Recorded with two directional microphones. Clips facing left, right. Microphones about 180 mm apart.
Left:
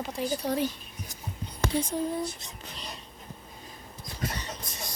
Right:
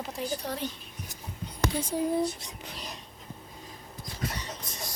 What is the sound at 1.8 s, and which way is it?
Speech, 10° right (ahead or behind).